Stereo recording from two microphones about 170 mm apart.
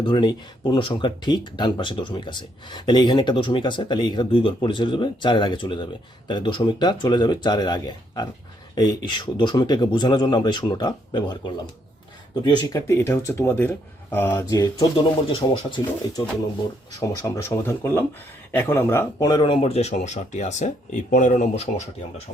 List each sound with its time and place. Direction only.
0.0 s speech: 25° left (ahead or behind)
12.4 s speech: 25° left (ahead or behind)
17.0 s speech: 20° left (ahead or behind); by 21.8 s 40° left (ahead or behind)